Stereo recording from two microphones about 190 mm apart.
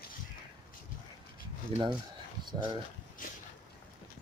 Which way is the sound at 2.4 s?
20° right (ahead or behind).